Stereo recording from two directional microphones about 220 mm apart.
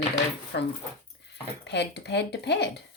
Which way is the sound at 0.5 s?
45° left (ahead or behind).